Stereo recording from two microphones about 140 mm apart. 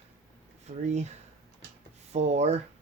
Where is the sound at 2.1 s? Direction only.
55° right (ahead or behind).